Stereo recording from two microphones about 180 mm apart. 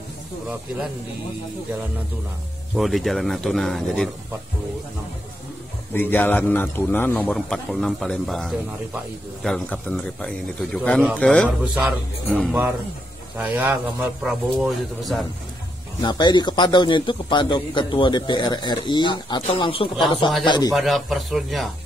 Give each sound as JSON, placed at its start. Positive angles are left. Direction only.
{"t": 2.7, "sound": "speech", "side_deg": 0}
{"t": 5.9, "sound": "speech", "side_deg": 10}
{"t": 11.4, "sound": "speech", "side_deg": -10}
{"t": 12.3, "sound": "speech", "side_deg": 0}
{"t": 13.4, "sound": "speech", "side_deg": -10}
{"t": 16.0, "sound": "a man's voice", "side_deg": 25}
{"t": 20.7, "sound": "speech", "side_deg": 0}